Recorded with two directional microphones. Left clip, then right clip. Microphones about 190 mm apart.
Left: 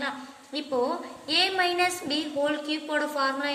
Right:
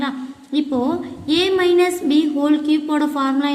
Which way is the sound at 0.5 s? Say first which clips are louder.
Right 7 dB; 20° right (ahead or behind).